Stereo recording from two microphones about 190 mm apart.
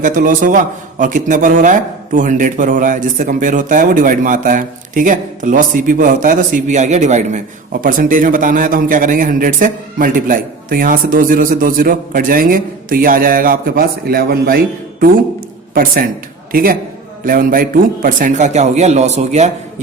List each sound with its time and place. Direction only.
0.0 s a man's voice: 45° right (ahead or behind)
15.7 s a man's voice: 50° right (ahead or behind)